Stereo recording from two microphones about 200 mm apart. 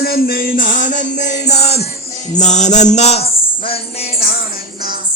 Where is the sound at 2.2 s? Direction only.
35° left (ahead or behind).